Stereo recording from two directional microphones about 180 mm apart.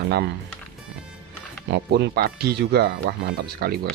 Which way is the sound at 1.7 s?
65° right (ahead or behind).